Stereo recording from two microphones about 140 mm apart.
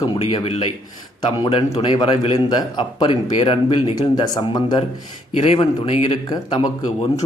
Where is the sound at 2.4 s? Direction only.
35° left (ahead or behind).